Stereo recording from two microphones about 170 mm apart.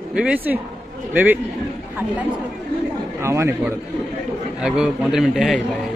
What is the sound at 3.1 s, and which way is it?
Speech, 15° right (ahead or behind).